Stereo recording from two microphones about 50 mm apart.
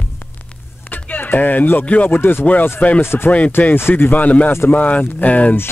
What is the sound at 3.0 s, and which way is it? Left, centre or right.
Speech, left.